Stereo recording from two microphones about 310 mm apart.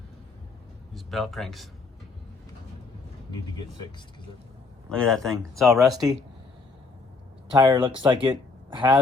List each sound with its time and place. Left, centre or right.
0.9 s speech: centre
4.9 s speech: centre
7.5 s speech: centre